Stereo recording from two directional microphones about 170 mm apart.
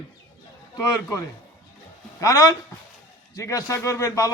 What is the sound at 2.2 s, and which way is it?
A man's voice, 20° left (ahead or behind).